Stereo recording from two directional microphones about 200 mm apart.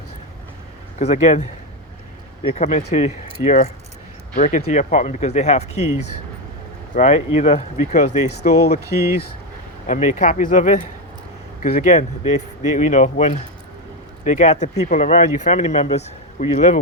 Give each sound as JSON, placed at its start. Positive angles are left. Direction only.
{"t": 0.9, "sound": "speech", "side_deg": 35}
{"t": 9.8, "sound": "speech", "side_deg": 40}